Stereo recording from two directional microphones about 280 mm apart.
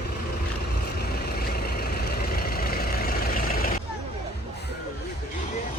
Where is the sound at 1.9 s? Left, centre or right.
Left.